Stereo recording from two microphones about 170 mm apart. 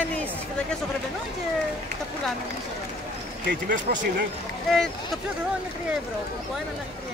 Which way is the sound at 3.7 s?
50° right (ahead or behind).